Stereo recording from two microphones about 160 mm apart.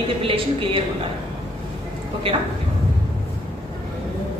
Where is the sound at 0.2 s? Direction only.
35° right (ahead or behind).